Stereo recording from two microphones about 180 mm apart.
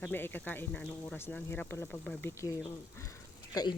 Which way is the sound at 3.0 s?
20° left (ahead or behind).